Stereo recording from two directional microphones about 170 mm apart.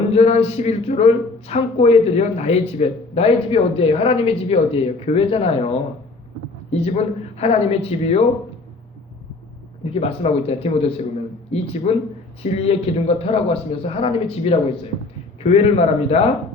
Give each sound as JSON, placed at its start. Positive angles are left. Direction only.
{"t": 0.1, "sound": "speech", "side_deg": 40}
{"t": 9.9, "sound": "speech", "side_deg": 35}